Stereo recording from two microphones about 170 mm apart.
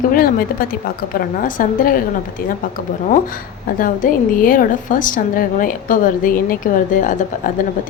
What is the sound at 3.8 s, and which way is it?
A woman's voice, 55° left (ahead or behind).